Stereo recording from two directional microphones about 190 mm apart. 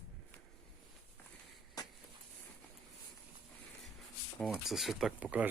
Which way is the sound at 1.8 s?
20° left (ahead or behind).